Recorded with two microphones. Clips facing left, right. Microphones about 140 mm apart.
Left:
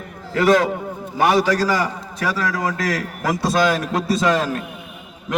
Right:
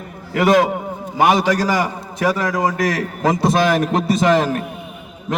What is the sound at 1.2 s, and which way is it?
A man's voice, 20° right (ahead or behind).